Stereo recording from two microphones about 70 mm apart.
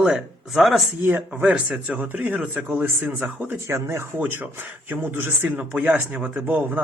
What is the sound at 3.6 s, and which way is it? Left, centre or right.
Speech, right.